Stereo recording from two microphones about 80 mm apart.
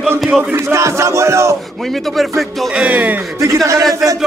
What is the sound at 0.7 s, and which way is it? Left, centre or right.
Music, right.